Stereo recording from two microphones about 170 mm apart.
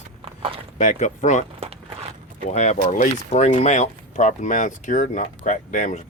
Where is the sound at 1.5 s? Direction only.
35° right (ahead or behind).